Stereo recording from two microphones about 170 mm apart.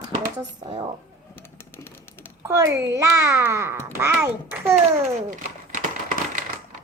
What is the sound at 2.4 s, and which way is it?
A child's voice, 15° right (ahead or behind).